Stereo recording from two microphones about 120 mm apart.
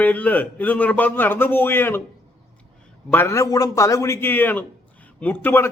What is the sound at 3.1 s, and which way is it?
A man's voice, 20° left (ahead or behind).